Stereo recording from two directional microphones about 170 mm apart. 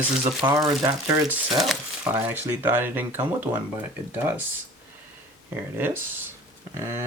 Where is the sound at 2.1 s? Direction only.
10° right (ahead or behind).